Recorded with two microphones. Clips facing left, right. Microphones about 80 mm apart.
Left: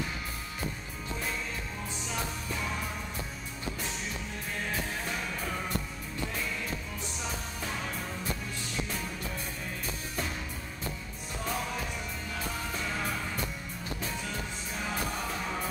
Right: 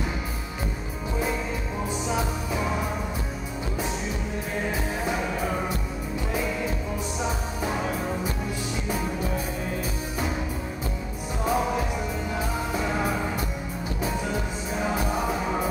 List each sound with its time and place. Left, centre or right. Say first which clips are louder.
2.0 s music: right 6 dB; centre
4.6 s music: right 6 dB; centre
11.4 s music: right 10 dB; centre